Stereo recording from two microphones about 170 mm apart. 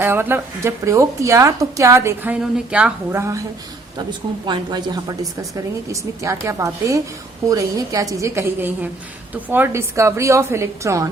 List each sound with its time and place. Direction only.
0.0 s a woman's voice: 15° right (ahead or behind)
4.4 s a woman's voice: 25° right (ahead or behind)